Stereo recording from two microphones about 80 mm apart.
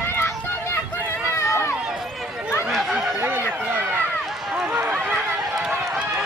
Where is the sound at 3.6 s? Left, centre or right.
Centre.